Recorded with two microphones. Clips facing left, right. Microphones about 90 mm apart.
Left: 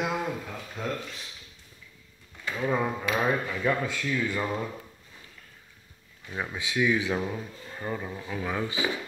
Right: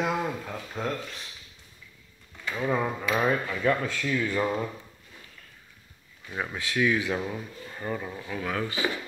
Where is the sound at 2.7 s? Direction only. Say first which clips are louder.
Right 1 dB; centre (ahead or behind).